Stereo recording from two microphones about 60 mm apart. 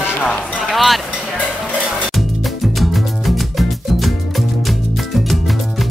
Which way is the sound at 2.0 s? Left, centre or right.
Centre.